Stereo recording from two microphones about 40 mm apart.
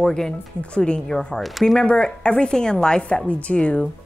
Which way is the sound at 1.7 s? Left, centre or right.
Left.